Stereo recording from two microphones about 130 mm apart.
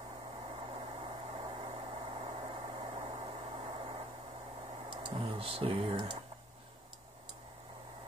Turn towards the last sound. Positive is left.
turn(degrees=-40)  # may be behind; listen again after turning